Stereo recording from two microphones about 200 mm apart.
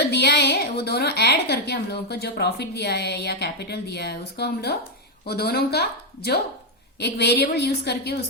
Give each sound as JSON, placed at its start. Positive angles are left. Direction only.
{"t": 0.1, "sound": "a woman's voice", "side_deg": 55}
{"t": 7.0, "sound": "a woman's voice", "side_deg": 55}